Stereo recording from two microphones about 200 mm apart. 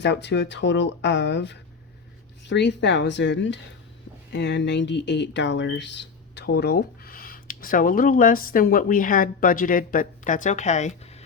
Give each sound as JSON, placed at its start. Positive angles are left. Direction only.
{"t": 0.0, "sound": "speech", "side_deg": 60}